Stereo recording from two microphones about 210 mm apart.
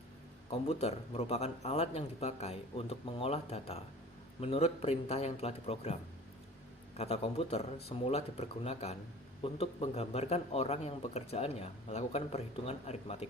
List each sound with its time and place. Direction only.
0.7 s a man's voice: 30° left (ahead or behind)